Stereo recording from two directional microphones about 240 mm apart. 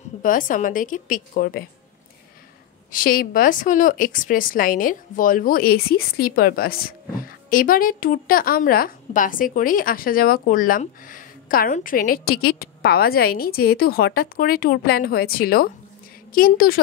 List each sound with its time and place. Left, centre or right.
0.2 s a woman's voice: left
2.9 s a woman's voice: left